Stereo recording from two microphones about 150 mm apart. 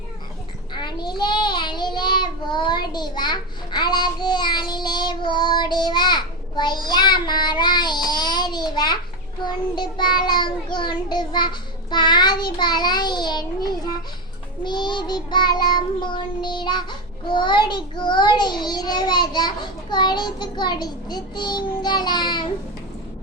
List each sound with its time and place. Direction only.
0.7 s child singing: 30° left (ahead or behind)